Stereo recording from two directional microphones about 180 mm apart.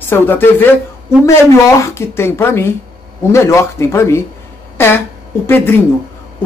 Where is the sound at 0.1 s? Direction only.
10° left (ahead or behind).